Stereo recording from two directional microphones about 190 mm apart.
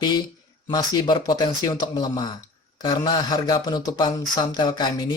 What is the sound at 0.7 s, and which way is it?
Speech, 20° left (ahead or behind).